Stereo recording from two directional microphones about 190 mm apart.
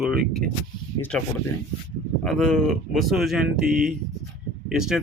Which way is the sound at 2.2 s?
5° left (ahead or behind).